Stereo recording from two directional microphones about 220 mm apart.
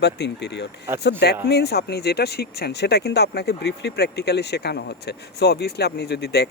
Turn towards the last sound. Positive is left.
turn(degrees=50)  # may be behind; listen again after turning